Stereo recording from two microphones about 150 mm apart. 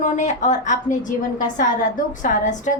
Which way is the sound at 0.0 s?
55° left (ahead or behind).